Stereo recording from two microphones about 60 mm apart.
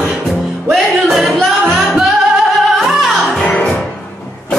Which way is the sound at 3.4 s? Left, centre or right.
Centre.